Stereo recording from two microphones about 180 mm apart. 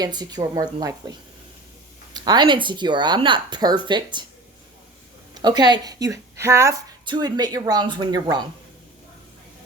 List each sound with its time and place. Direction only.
0.0 s speech: 20° right (ahead or behind)
2.1 s speech: 25° right (ahead or behind)
5.3 s speech: 25° right (ahead or behind)